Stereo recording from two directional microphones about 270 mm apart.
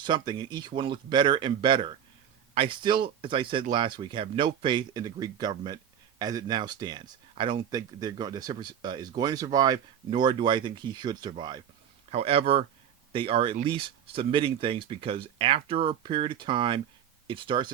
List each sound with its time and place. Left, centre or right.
0.0 s speech: centre